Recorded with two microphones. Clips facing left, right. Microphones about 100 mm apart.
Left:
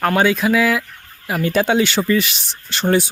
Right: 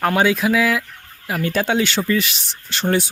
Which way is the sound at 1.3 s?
10° left (ahead or behind).